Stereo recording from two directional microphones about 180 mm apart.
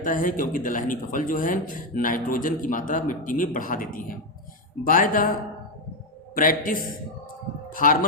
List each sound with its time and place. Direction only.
0.0 s speech: 50° left (ahead or behind)